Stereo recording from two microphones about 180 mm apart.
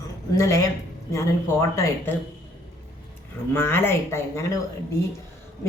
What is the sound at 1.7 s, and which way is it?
Speech, 15° left (ahead or behind).